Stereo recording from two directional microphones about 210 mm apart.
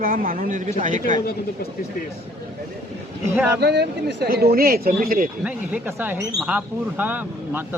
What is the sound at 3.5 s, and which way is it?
Speech, 50° right (ahead or behind).